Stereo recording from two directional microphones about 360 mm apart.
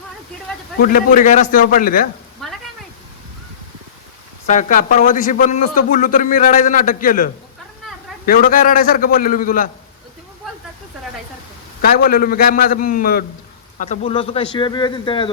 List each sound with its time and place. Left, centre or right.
0.8 s a man's voice: left
2.4 s a sound: centre
4.4 s a man's voice: left
8.3 s a man's voice: left
11.8 s a man's voice: left